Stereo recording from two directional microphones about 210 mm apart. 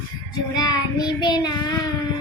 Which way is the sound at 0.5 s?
20° left (ahead or behind).